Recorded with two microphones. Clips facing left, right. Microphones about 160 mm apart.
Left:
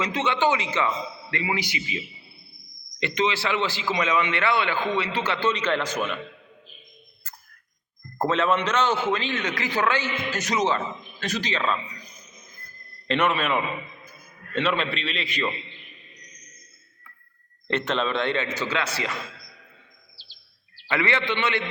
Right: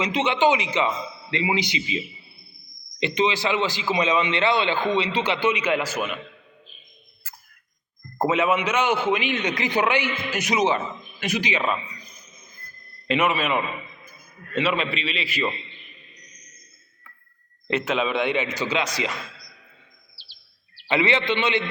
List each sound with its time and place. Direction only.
0.0 s a man's voice: 15° right (ahead or behind)
3.0 s a man's voice: 20° right (ahead or behind)
7.3 s a sound: 10° right (ahead or behind)
8.2 s a man's voice: 10° right (ahead or behind)
13.1 s a man's voice: 5° right (ahead or behind)
17.7 s a man's voice: 5° right (ahead or behind)
20.8 s a man's voice: 20° right (ahead or behind)